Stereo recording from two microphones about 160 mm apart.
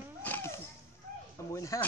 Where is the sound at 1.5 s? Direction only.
20° left (ahead or behind).